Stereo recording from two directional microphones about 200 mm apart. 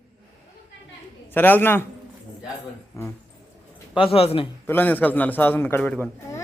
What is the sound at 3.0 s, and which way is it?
Speech, 15° left (ahead or behind).